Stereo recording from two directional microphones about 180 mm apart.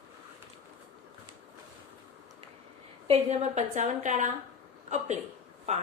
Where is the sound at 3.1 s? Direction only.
35° right (ahead or behind).